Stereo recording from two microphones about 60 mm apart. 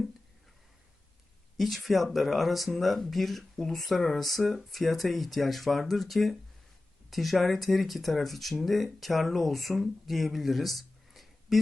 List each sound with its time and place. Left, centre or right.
1.5 s speech: centre